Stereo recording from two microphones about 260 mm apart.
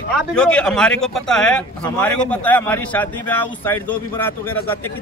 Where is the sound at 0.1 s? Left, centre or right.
Centre.